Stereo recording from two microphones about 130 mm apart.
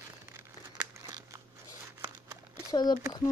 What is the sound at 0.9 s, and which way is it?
Crumpling, 25° right (ahead or behind).